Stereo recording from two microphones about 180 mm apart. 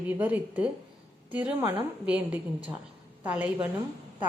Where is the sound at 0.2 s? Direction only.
10° right (ahead or behind).